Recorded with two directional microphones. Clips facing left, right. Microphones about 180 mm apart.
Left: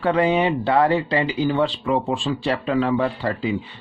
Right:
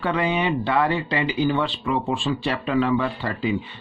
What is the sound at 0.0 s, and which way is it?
Speech, 35° left (ahead or behind).